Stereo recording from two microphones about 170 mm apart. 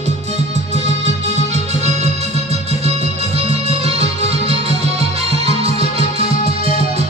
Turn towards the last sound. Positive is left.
turn(degrees=-40)  # may be behind; listen again after turning